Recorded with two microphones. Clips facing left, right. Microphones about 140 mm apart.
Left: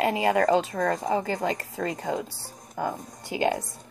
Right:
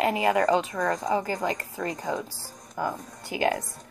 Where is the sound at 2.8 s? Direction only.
25° left (ahead or behind).